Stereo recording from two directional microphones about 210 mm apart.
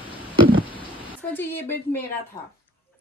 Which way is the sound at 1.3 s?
10° left (ahead or behind).